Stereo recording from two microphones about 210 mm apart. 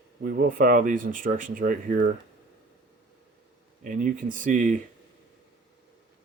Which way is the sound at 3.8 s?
40° right (ahead or behind).